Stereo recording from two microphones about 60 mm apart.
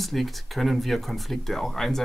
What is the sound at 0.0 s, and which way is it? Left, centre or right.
Speech, centre.